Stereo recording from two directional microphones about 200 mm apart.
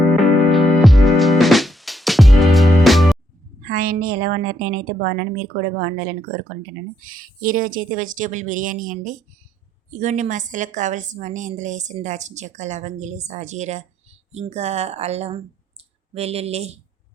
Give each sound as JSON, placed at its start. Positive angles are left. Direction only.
{"t": 0.1, "sound": "music", "side_deg": 0}
{"t": 3.6, "sound": "a woman's voice", "side_deg": -45}